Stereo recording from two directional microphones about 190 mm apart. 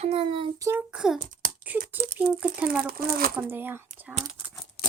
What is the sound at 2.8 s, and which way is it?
Speech, 50° right (ahead or behind).